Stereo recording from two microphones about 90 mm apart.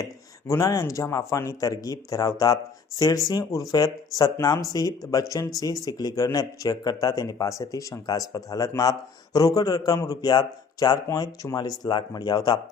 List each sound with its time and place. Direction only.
0.0 s speech: 35° left (ahead or behind)